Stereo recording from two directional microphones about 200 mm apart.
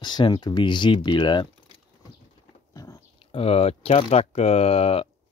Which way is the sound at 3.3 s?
30° left (ahead or behind).